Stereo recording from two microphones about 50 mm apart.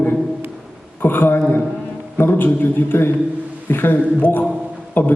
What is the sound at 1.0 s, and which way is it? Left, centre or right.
A man's voice, left.